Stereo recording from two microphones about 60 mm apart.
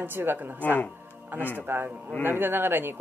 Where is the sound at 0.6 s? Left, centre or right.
Left.